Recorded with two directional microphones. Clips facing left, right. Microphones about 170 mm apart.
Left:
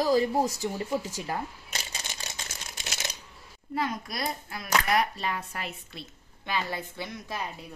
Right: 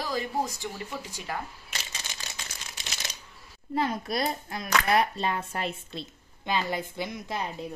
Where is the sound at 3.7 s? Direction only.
30° right (ahead or behind); by 7.3 s 15° right (ahead or behind).